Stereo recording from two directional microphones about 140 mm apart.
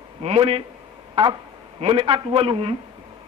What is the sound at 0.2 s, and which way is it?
Speech, 45° right (ahead or behind).